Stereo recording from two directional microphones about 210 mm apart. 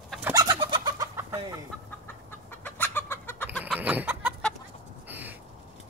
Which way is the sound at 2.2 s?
10° left (ahead or behind).